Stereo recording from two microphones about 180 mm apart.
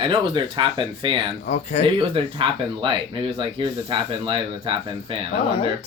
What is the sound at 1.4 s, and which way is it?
Speech, 40° left (ahead or behind).